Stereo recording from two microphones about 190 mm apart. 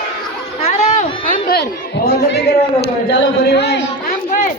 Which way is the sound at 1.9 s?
60° left (ahead or behind).